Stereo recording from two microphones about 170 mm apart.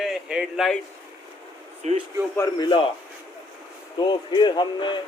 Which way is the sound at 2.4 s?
25° left (ahead or behind).